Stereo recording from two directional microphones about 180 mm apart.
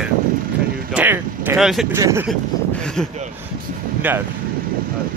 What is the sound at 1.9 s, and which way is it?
Speech, 15° right (ahead or behind).